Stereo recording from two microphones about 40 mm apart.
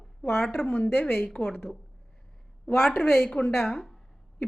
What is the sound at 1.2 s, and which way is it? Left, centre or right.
Speech, left.